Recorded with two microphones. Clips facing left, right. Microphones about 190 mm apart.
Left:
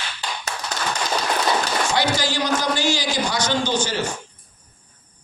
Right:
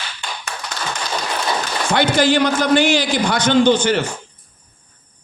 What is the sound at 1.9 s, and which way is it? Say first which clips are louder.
A man's voice: right 11 dB; 55° right (ahead or behind).